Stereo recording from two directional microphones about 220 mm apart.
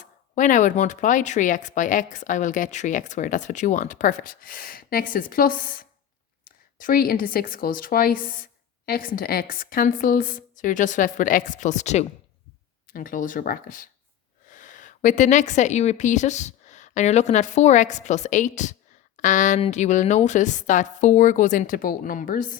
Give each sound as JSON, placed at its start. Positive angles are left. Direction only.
{"t": 0.3, "sound": "a woman's voice", "side_deg": 35}